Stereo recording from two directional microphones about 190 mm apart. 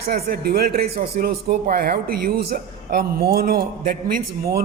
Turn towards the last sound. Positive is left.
turn(degrees=-50)  # may be behind; listen again after turning